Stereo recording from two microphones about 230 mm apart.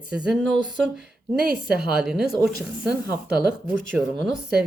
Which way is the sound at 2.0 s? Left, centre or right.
Centre.